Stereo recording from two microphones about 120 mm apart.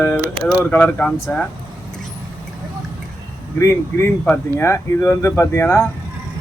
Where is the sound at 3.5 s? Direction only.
20° left (ahead or behind).